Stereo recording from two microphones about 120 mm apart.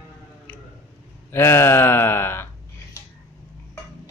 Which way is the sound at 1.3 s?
20° left (ahead or behind).